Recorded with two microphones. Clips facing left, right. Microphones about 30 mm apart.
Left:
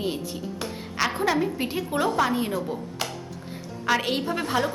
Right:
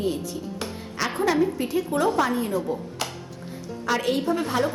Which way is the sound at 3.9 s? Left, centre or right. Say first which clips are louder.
Right 3 dB; left.